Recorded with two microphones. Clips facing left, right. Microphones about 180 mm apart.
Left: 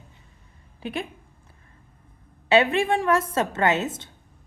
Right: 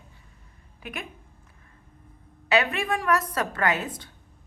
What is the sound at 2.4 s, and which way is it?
A woman's voice, 25° left (ahead or behind).